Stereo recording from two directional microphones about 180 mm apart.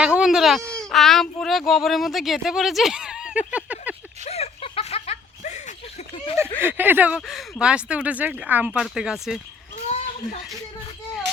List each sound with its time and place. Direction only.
0.0 s speech: 5° right (ahead or behind)
4.3 s snicker: 35° left (ahead or behind)
6.6 s speech: 10° right (ahead or behind)
9.7 s children playing: 45° left (ahead or behind)